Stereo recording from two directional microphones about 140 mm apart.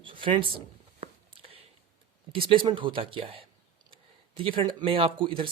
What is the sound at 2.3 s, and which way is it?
Speech, 35° right (ahead or behind).